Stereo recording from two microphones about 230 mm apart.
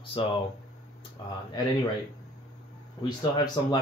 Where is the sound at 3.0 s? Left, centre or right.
Centre.